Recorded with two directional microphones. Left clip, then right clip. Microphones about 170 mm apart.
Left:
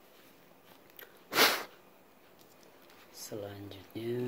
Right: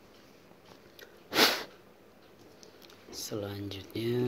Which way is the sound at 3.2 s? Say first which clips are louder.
Right 4 dB; 30° right (ahead or behind).